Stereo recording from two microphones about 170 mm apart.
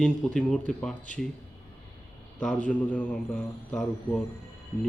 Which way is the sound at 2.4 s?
5° left (ahead or behind).